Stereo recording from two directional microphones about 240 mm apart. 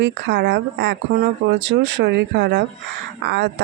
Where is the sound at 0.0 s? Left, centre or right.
Right.